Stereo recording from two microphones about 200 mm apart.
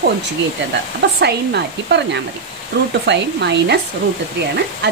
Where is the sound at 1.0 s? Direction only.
55° right (ahead or behind).